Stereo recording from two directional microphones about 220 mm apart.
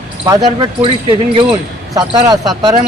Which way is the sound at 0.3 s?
20° right (ahead or behind).